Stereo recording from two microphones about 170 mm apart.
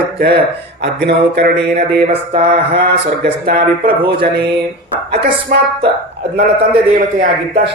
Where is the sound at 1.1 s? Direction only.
80° right.